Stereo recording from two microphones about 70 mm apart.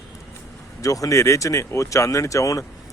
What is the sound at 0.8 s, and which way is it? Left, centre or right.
Speech, left.